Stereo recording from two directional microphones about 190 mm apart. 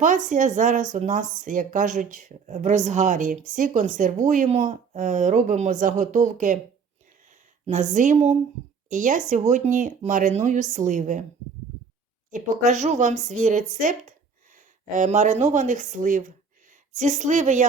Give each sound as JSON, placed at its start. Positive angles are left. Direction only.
{"t": 0.0, "sound": "speech", "side_deg": -45}
{"t": 7.6, "sound": "speech", "side_deg": -40}
{"t": 12.3, "sound": "speech", "side_deg": -40}